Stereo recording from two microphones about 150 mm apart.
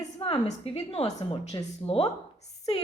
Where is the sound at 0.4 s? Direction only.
40° left (ahead or behind).